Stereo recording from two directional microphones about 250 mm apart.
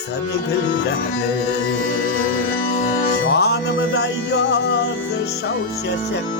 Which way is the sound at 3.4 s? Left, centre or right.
Left.